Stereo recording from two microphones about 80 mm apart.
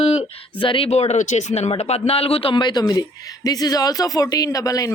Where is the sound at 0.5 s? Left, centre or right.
Left.